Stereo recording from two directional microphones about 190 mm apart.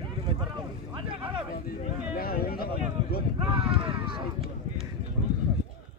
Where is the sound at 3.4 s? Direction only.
30° right (ahead or behind).